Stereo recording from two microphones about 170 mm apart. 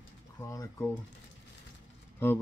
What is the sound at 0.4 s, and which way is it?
Speech, 15° left (ahead or behind).